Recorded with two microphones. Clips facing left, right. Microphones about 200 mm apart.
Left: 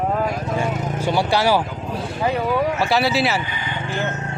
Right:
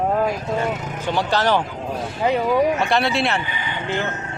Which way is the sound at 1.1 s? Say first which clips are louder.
Left 1 dB; 10° left (ahead or behind).